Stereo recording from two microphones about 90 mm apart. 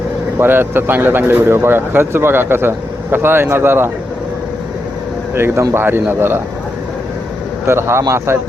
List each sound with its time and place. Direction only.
0.3 s a man's voice: 25° right (ahead or behind)
5.3 s a man's voice: 25° right (ahead or behind)
7.7 s a man's voice: 30° right (ahead or behind)